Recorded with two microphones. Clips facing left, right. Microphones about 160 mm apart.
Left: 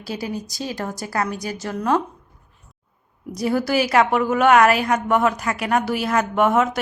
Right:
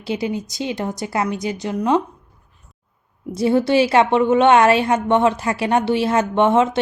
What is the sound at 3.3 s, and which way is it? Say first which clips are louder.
A woman's voice: right 5 dB; 25° right (ahead or behind).